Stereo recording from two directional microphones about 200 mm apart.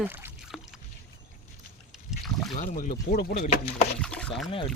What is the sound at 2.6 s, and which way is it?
Speech, 40° left (ahead or behind).